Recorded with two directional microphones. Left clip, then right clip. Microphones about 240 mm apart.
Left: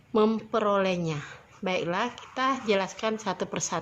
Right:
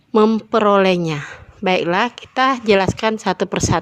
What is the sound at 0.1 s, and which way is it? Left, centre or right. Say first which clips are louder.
A woman's voice: right 10 dB; right.